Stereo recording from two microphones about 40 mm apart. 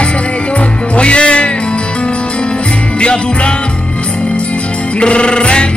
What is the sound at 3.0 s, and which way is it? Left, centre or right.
Music, left.